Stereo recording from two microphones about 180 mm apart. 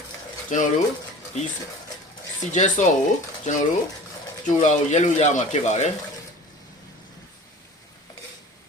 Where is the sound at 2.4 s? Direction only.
40° left (ahead or behind).